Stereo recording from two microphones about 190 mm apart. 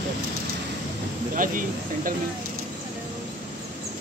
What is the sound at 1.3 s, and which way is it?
Speech, 45° right (ahead or behind).